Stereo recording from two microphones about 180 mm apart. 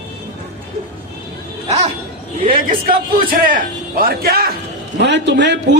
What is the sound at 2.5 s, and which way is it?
A man's voice, 50° right (ahead or behind).